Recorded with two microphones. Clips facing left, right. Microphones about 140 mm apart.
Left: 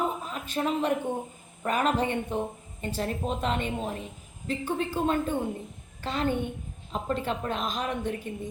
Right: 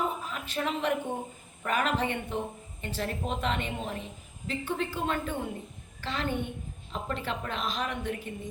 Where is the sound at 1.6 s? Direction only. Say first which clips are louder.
Left 3 dB; 35° left (ahead or behind).